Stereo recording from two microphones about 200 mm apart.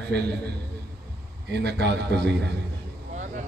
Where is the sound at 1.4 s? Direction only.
55° right (ahead or behind).